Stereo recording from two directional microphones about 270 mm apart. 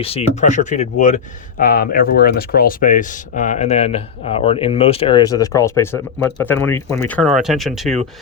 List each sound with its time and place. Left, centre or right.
0.0 s speech: left; by 7.9 s centre